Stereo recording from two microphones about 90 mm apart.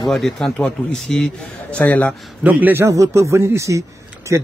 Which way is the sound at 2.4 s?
20° right (ahead or behind).